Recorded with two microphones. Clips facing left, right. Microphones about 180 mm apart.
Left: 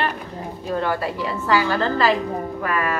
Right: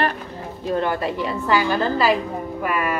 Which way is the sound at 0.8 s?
20° right (ahead or behind).